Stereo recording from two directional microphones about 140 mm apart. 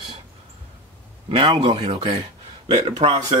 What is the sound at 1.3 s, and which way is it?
Speech, 40° right (ahead or behind).